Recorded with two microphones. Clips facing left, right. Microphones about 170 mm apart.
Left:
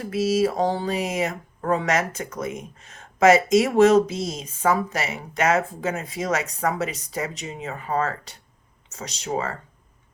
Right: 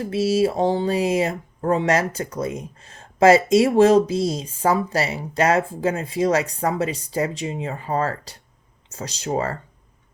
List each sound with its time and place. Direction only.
0.1 s speech: 30° right (ahead or behind)